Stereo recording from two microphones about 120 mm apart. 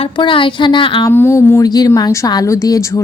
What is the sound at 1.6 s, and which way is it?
A woman's voice, 35° left (ahead or behind).